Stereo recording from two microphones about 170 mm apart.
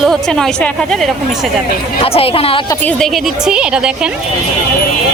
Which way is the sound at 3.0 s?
5° right (ahead or behind).